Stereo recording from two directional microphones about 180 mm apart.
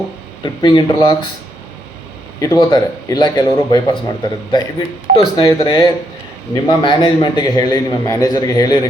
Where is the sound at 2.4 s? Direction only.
20° left (ahead or behind).